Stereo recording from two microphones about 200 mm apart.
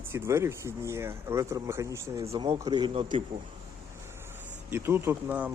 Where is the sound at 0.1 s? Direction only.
15° right (ahead or behind).